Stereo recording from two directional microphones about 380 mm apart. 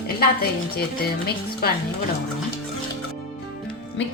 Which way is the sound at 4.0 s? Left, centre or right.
Left.